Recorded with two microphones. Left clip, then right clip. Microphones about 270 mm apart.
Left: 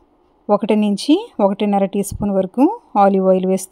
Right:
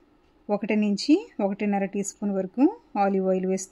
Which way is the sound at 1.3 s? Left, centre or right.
Left.